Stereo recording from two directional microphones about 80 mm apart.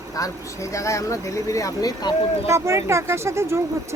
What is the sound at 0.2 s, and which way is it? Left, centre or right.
Speech, left.